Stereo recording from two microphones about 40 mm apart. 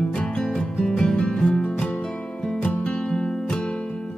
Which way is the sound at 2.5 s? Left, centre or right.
Left.